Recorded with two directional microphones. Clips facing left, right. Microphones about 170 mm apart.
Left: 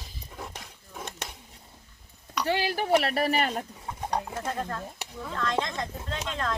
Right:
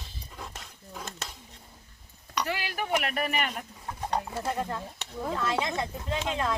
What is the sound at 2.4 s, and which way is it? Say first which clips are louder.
Speech: left 7 dB; 30° left (ahead or behind).